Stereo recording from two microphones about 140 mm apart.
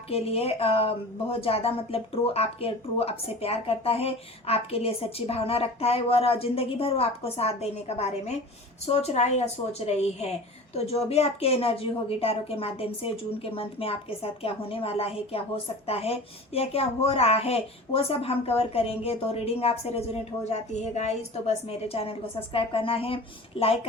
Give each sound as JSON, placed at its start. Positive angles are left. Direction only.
{"t": 0.1, "sound": "a woman's voice", "side_deg": 45}